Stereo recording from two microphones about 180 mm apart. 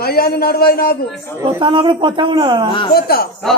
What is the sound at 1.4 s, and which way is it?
A man's voice, 25° right (ahead or behind).